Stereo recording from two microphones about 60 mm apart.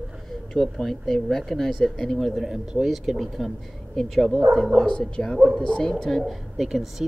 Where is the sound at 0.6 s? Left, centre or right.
Centre.